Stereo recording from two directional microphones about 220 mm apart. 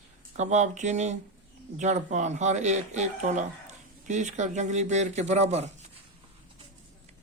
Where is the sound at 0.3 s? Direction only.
35° right (ahead or behind).